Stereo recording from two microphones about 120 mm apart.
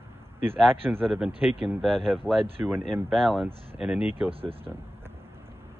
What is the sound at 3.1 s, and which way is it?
Speech, centre (ahead or behind).